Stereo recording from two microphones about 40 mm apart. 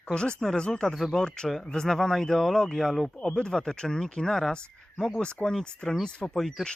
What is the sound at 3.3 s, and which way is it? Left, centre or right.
Speech, left.